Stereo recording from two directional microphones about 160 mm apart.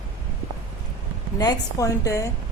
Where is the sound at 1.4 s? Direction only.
20° left (ahead or behind).